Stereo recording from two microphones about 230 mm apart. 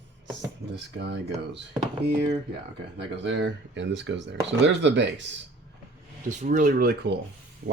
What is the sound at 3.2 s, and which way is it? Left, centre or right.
Speech, right.